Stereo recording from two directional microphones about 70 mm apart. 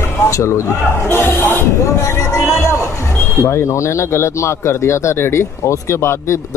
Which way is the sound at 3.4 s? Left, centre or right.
Left.